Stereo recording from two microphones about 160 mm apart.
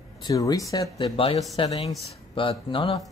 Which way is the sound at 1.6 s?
25° left (ahead or behind).